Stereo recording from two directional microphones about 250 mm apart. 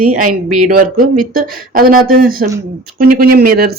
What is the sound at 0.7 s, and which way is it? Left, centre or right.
Speech, right.